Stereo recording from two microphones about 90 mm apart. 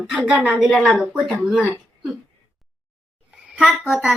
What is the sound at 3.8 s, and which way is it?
Speech, 10° right (ahead or behind).